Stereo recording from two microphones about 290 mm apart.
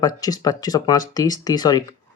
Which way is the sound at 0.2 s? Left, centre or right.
Centre.